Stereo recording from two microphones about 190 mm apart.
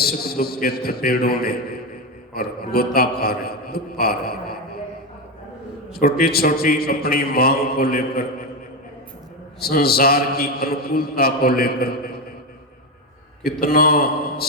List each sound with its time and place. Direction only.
0.0 s a man's voice: 55° left (ahead or behind)
5.9 s a man's voice: 55° left (ahead or behind)
9.6 s a man's voice: 55° left (ahead or behind)
13.4 s a man's voice: 55° left (ahead or behind)